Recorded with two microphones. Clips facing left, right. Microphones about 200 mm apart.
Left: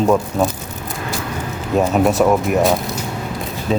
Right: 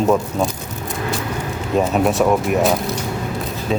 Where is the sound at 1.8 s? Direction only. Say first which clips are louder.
Left 2 dB; centre (ahead or behind).